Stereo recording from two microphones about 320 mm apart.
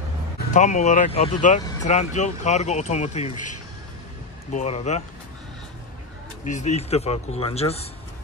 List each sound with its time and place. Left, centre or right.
0.5 s speech: left
4.5 s speech: left
6.4 s speech: left